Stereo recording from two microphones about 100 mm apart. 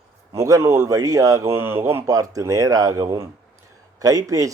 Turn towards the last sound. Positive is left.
turn(degrees=-35)  # may be behind; listen again after turning